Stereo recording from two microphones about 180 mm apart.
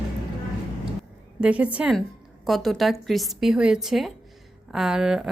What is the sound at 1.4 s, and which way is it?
A woman's voice, 5° right (ahead or behind).